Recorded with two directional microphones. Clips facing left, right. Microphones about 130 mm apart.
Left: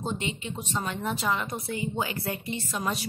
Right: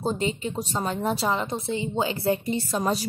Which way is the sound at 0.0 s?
35° right (ahead or behind).